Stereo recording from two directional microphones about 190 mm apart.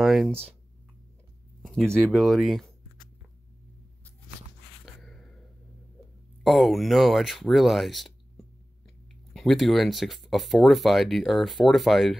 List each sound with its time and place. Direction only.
0.0 s speech: centre (ahead or behind)
2.0 s speech: centre (ahead or behind)
4.8 s a sound: centre (ahead or behind)
6.4 s speech: centre (ahead or behind)